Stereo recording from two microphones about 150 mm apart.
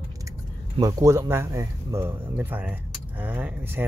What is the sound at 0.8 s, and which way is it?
Speech, 25° right (ahead or behind).